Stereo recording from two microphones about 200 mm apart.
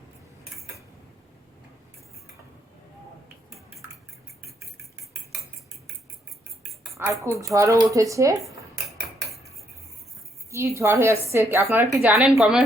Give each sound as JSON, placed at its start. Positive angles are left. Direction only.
{"t": 6.9, "sound": "a woman's voice", "side_deg": -15}
{"t": 10.5, "sound": "a woman's voice", "side_deg": -15}